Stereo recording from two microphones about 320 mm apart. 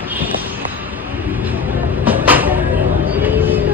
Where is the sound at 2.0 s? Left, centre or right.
Centre.